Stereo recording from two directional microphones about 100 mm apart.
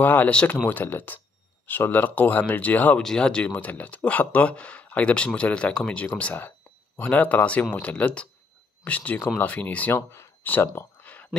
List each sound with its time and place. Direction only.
0.0 s speech: 15° left (ahead or behind)
9.9 s speech: 25° left (ahead or behind)
11.0 s a sound: 15° left (ahead or behind)